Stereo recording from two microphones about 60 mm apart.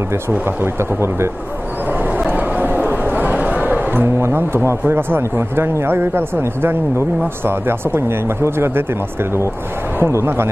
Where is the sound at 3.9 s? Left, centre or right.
Right.